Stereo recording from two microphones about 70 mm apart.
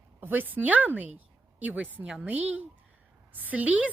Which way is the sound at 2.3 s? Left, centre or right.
Right.